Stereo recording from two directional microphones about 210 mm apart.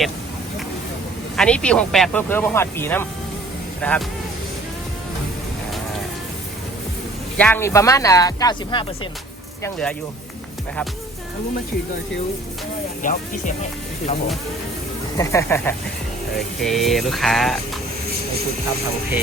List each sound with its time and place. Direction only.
1.4 s speech: 5° left (ahead or behind)
7.3 s speech: 10° left (ahead or behind)
9.6 s speech: 5° left (ahead or behind)
13.0 s speech: 35° left (ahead or behind)
15.2 s speech: 15° left (ahead or behind)